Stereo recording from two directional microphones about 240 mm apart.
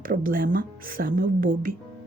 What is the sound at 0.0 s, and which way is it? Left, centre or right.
Speech, right.